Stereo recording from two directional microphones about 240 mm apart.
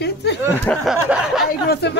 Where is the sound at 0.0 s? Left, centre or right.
Left.